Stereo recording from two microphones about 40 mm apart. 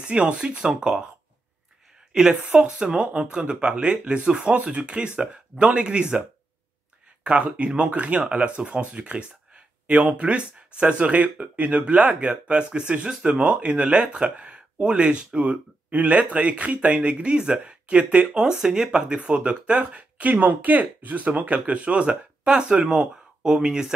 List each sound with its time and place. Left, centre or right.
0.0 s speech: right
2.4 s speech: right
7.2 s speech: right
18.3 s speech: centre